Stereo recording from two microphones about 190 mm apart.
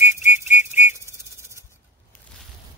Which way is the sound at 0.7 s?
10° right (ahead or behind).